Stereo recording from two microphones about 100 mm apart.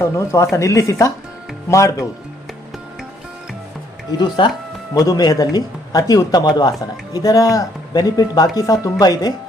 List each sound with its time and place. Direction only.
0.0 s speech: 30° left (ahead or behind)
4.2 s speech: 50° left (ahead or behind)
4.9 s speech: 40° left (ahead or behind)